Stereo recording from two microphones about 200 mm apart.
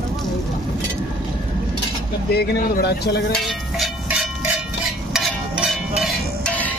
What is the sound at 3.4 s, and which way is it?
Cowbell, centre (ahead or behind).